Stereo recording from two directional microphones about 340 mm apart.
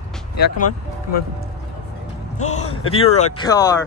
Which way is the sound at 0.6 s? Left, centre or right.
Left.